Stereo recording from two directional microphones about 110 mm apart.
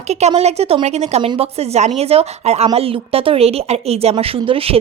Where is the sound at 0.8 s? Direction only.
80° right.